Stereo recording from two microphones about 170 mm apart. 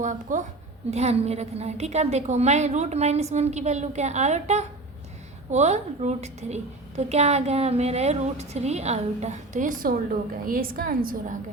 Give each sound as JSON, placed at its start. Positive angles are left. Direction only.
{"t": 0.0, "sound": "a woman's voice", "side_deg": -50}